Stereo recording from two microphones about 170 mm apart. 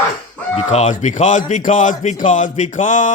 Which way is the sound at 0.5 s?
40° left (ahead or behind).